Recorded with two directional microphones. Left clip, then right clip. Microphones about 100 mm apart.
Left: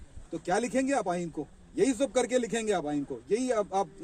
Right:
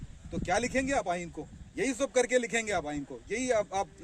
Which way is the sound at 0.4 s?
25° right (ahead or behind).